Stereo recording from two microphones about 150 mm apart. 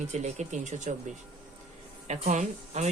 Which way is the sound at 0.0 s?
50° right (ahead or behind).